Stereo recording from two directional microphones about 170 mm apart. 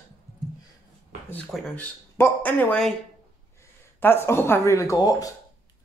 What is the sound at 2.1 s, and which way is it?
Speech, 10° left (ahead or behind).